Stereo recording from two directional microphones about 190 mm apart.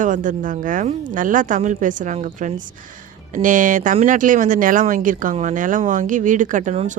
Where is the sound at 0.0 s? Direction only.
45° right (ahead or behind).